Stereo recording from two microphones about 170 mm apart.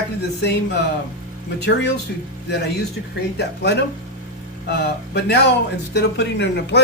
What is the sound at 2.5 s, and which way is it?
Speech, 80° left.